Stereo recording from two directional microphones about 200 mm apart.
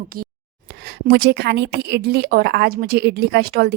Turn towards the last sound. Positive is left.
turn(degrees=-50)  # may be behind; listen again after turning